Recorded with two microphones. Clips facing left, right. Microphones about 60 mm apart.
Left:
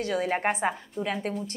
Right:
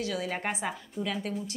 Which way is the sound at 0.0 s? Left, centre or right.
Left.